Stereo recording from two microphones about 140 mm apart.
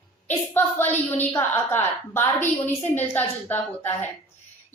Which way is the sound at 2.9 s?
15° left (ahead or behind).